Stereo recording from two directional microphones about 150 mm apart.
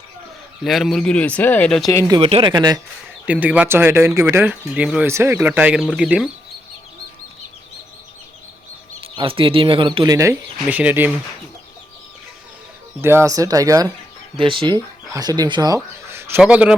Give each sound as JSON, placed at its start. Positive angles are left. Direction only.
{"t": 0.6, "sound": "speech", "side_deg": 0}
{"t": 2.2, "sound": "speech", "side_deg": -35}
{"t": 3.2, "sound": "speech", "side_deg": -10}
{"t": 9.0, "sound": "speech", "side_deg": -35}
{"t": 10.7, "sound": "speech", "side_deg": -10}
{"t": 13.0, "sound": "speech", "side_deg": -15}
{"t": 14.3, "sound": "speech", "side_deg": -35}